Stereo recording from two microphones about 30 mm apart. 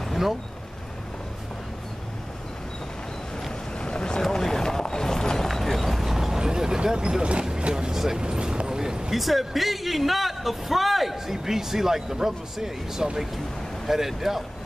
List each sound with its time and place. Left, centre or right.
3.8 s boat: left
4.4 s boat: centre
5.5 s clip-clop: centre
6.0 s vehicle: centre
6.4 s vehicle: right
7.0 s speech: right
7.9 s speech: centre
8.2 s a sound: right
9.1 s speech: centre